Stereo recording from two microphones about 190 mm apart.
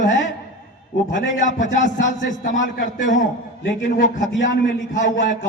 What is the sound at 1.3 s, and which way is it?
A man's voice, 40° left (ahead or behind).